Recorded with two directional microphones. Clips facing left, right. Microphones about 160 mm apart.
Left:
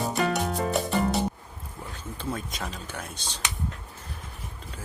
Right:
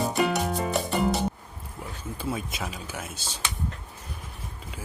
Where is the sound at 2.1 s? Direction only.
5° right (ahead or behind).